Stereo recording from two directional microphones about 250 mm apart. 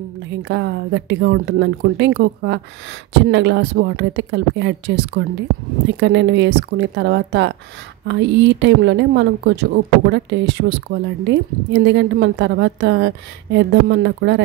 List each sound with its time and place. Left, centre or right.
0.4 s a woman's voice: right